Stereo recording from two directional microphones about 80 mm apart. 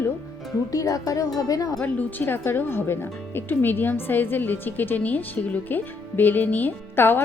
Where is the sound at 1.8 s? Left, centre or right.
Left.